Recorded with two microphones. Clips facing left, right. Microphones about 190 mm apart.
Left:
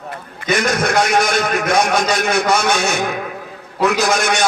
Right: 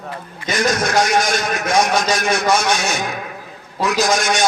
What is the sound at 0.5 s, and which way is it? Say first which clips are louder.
A man's voice: even; 60° left (ahead or behind).